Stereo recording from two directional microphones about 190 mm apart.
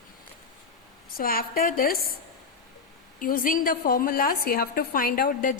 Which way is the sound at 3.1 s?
45° left (ahead or behind).